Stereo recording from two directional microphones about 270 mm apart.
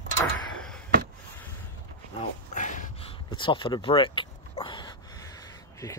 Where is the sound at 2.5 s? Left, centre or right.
Left.